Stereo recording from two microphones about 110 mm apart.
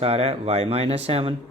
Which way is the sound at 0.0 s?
65° right (ahead or behind).